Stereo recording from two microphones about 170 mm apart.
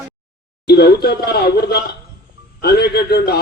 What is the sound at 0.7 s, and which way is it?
Speech, 70° left (ahead or behind).